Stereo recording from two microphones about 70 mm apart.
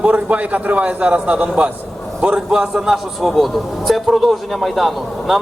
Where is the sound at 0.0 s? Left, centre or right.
Centre.